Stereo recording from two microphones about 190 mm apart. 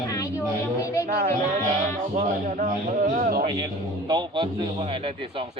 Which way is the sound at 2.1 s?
40° right (ahead or behind).